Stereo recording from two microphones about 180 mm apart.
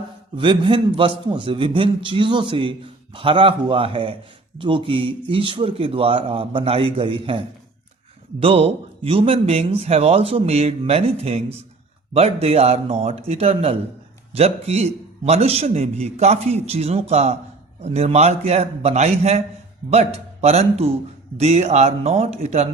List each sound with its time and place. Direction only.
0.3 s a man's voice: 30° right (ahead or behind)